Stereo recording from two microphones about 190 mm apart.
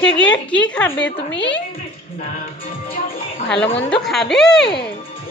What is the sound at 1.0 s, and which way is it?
Speech, 70° left (ahead or behind).